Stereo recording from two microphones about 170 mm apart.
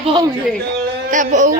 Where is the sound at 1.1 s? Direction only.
50° right (ahead or behind).